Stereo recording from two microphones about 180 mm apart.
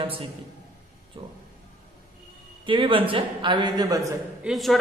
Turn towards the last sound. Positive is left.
turn(degrees=0)  # may be behind; listen again after turning